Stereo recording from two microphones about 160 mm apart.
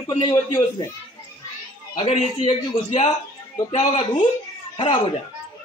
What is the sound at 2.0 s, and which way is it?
A man's voice, 40° left (ahead or behind).